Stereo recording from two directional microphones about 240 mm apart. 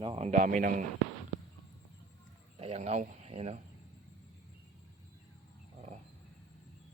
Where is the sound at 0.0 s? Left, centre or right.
Right.